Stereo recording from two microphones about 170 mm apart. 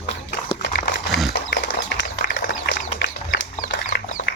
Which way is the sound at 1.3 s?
85° left.